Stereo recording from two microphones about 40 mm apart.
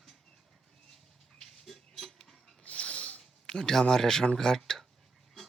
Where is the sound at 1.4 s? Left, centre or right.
Centre.